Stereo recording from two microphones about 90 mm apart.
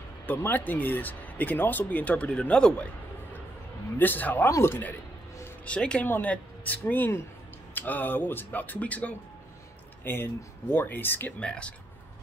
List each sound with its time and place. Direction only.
0.3 s speech: 20° left (ahead or behind)
4.0 s speech: 20° left (ahead or behind)
5.7 s speech: 10° left (ahead or behind)